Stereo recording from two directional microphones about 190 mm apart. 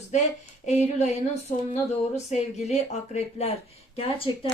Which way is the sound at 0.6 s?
35° left (ahead or behind).